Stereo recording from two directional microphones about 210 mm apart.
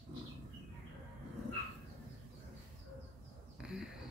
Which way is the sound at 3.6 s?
5° right (ahead or behind).